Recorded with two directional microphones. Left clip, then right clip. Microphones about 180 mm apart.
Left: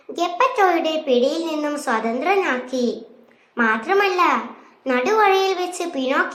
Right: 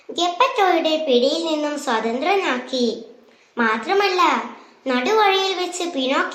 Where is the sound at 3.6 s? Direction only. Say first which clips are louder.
Left 1 dB; 25° left (ahead or behind).